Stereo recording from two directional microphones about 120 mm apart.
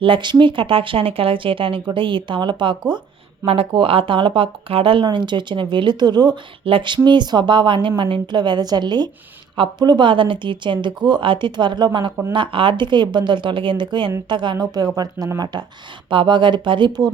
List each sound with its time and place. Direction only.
0.0 s speech: 45° right (ahead or behind)
3.4 s speech: 55° right (ahead or behind)